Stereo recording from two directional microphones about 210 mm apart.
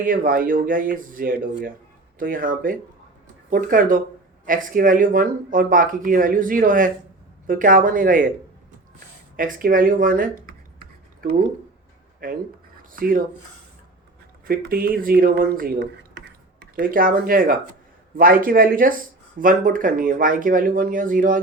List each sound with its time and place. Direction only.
0.0 s speech: 40° right (ahead or behind)
9.3 s speech: 45° right (ahead or behind)
10.8 s a sound: 45° right (ahead or behind)
12.2 s speech: 40° right (ahead or behind)
14.4 s speech: 45° right (ahead or behind)